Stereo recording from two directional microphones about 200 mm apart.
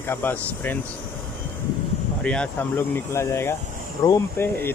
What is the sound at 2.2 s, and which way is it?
Speech, 5° left (ahead or behind).